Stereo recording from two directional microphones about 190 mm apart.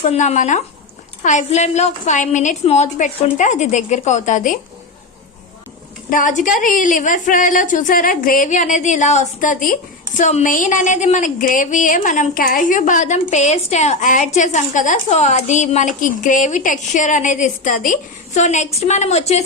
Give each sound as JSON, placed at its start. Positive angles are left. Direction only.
{"t": 0.0, "sound": "speech", "side_deg": 35}
{"t": 6.1, "sound": "a woman's voice", "side_deg": 45}